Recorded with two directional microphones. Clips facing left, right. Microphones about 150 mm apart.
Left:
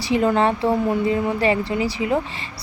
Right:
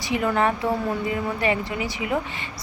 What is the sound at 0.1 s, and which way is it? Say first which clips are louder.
Speech: left 4 dB; 30° left (ahead or behind).